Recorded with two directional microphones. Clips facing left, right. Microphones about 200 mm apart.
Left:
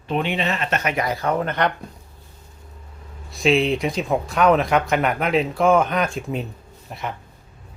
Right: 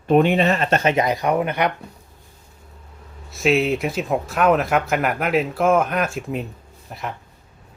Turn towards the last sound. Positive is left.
turn(degrees=0)  # may be behind; listen again after turning